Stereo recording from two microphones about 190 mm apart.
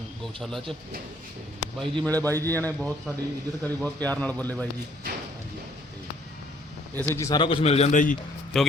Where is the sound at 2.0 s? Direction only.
10° left (ahead or behind).